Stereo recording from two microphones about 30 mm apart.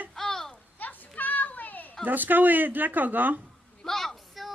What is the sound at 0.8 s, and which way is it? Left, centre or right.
Children playing, left.